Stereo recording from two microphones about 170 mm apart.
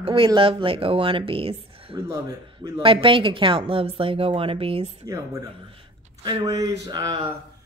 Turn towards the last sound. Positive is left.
turn(degrees=-25)  # may be behind; listen again after turning